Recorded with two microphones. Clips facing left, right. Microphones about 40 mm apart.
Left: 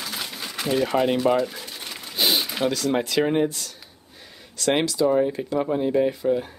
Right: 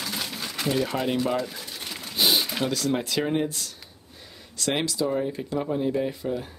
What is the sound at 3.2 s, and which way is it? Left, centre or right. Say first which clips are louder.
Speech: left 5 dB; centre.